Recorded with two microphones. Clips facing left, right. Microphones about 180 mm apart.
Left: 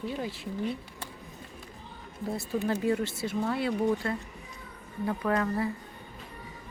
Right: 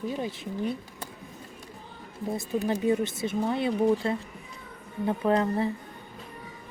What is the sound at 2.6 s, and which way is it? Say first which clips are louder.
Speech: right 3 dB; 20° right (ahead or behind).